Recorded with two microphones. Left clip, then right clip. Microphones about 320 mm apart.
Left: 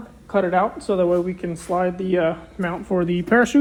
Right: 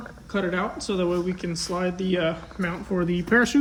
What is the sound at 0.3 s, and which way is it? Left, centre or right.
Speech, centre.